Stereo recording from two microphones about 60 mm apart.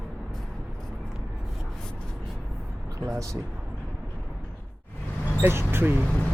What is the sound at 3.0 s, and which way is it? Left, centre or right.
Speech, right.